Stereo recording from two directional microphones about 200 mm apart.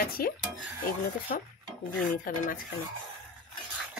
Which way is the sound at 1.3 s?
45° left (ahead or behind).